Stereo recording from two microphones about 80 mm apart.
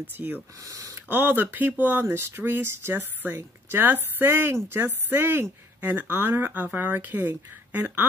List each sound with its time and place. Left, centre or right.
0.0 s a woman's voice: right
0.7 s speech: right
1.0 s a woman's voice: right